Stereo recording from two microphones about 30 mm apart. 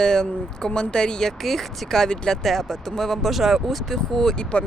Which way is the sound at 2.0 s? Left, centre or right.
Left.